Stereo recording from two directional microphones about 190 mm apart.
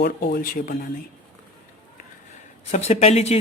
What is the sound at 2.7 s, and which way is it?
Speech, 35° left (ahead or behind).